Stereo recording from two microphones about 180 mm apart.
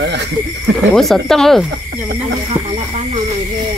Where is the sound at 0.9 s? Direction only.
Centre (ahead or behind).